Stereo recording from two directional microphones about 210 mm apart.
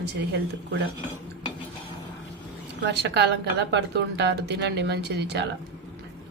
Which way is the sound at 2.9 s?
55° right (ahead or behind).